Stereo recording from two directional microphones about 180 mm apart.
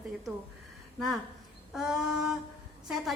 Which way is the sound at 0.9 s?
Centre (ahead or behind).